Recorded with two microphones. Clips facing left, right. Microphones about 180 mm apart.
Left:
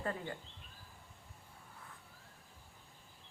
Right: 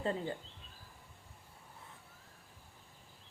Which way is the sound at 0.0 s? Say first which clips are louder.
Right 4 dB; 25° right (ahead or behind).